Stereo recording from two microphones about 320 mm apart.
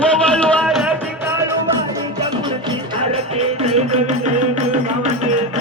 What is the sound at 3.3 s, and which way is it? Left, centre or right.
Music, centre.